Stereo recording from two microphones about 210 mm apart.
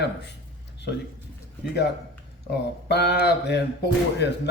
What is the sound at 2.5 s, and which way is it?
Speech, 50° left (ahead or behind).